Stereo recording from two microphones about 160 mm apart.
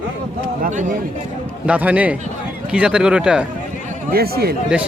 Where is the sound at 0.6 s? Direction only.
50° right (ahead or behind).